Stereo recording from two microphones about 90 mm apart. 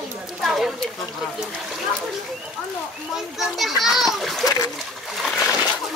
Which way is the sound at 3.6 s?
Centre (ahead or behind).